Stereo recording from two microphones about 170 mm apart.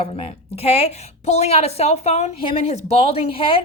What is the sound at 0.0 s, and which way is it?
A woman's voice, 35° left (ahead or behind).